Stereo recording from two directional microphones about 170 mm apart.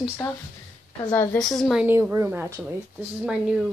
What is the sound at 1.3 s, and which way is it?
Speech, centre (ahead or behind).